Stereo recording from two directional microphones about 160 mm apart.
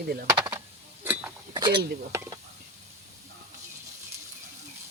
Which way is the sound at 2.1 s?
20° right (ahead or behind).